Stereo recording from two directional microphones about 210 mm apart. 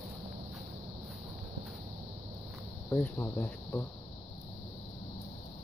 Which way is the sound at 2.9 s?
10° left (ahead or behind).